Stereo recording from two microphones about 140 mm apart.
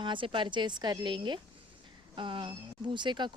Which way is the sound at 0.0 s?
35° right (ahead or behind).